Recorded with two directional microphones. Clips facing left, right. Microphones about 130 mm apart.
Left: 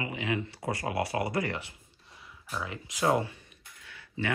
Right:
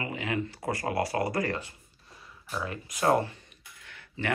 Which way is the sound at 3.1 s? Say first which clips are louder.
Right 3 dB; 15° left (ahead or behind).